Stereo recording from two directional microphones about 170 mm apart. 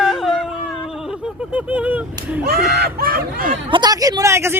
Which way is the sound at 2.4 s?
65° right (ahead or behind).